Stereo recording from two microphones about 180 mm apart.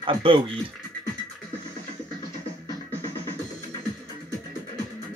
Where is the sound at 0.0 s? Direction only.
30° right (ahead or behind).